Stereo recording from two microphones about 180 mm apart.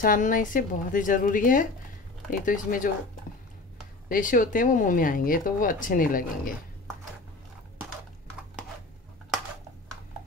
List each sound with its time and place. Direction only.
0.0 s speech: 50° left (ahead or behind)
4.1 s speech: 45° left (ahead or behind)